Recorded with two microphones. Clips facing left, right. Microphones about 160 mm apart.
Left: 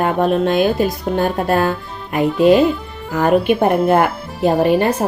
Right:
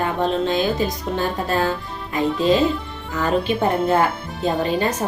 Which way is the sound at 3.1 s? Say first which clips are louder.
Left 6 dB; 60° left (ahead or behind).